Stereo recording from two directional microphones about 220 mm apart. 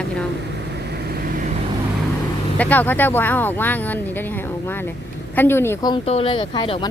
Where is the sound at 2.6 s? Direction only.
5° left (ahead or behind).